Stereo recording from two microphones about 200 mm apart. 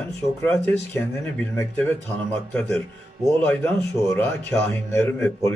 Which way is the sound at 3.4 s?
10° left (ahead or behind).